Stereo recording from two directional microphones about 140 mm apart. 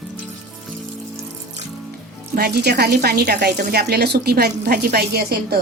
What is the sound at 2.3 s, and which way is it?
A woman's voice, 90° right.